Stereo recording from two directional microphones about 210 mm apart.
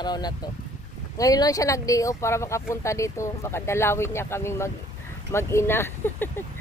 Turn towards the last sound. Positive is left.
turn(degrees=10)  # may be behind; listen again after turning